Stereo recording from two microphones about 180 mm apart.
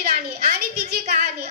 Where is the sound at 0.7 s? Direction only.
40° right (ahead or behind).